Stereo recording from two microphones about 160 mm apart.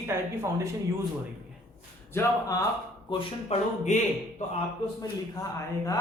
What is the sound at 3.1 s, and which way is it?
Speech, 35° left (ahead or behind).